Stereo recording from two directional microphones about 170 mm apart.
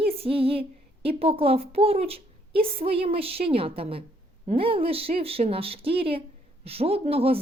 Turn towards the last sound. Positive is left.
turn(degrees=-35)  # may be behind; listen again after turning